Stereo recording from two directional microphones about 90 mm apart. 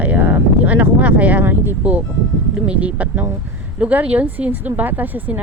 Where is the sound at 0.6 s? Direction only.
15° right (ahead or behind).